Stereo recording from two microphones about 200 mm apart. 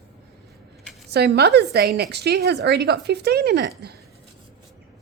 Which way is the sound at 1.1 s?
55° right (ahead or behind).